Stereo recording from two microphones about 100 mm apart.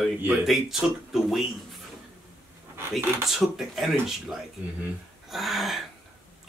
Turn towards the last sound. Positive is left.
turn(degrees=0)  # may be behind; listen again after turning